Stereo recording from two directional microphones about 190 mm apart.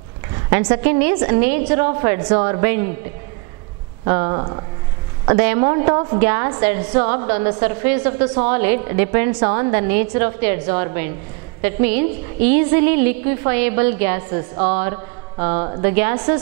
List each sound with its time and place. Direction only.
0.5 s a woman's voice: 20° right (ahead or behind)
4.0 s speech: 25° right (ahead or behind)
5.2 s a woman's voice: 15° right (ahead or behind)